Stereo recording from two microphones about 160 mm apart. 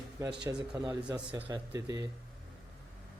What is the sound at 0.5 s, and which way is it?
Speech, 10° right (ahead or behind).